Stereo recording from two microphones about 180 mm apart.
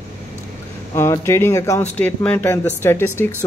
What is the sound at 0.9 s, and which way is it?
Speech, 15° left (ahead or behind).